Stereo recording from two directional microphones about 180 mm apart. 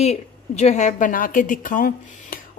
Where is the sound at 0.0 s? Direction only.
35° left (ahead or behind).